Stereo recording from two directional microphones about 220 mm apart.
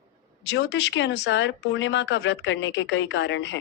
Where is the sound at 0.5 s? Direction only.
55° left (ahead or behind).